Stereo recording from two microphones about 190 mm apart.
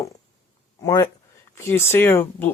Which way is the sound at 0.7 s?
15° left (ahead or behind).